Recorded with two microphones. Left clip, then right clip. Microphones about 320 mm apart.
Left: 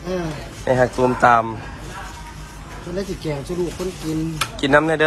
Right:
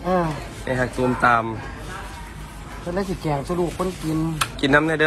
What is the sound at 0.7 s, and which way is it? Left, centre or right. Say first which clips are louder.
Speech: left 5 dB; centre.